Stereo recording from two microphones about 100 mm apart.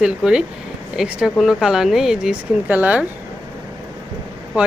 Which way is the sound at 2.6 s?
15° right (ahead or behind).